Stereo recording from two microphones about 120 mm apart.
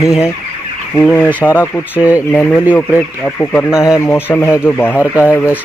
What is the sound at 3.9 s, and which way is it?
Speech, 20° left (ahead or behind).